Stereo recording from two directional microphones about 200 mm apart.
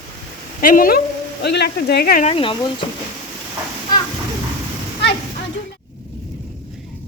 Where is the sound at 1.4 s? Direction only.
55° left (ahead or behind).